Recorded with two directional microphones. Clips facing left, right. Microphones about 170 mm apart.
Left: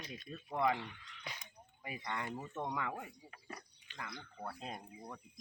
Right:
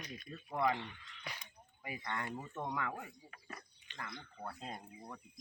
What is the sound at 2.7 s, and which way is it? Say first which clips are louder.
Speech: even; 10° left (ahead or behind).